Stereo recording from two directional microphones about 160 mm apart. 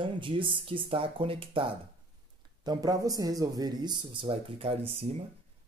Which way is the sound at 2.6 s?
25° right (ahead or behind).